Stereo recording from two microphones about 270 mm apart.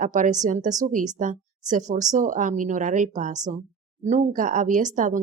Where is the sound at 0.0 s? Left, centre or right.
Right.